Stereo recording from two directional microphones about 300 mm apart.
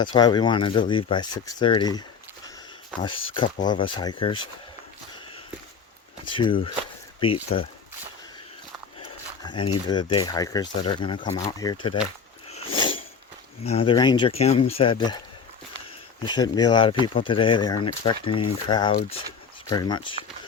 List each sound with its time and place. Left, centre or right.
0.0 s speech: centre
6.2 s speech: centre
9.8 s speech: centre
12.5 s a sound: centre
13.7 s speech: centre
16.2 s speech: centre